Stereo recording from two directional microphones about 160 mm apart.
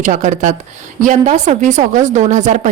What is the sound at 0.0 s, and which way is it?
Speech, 50° right (ahead or behind).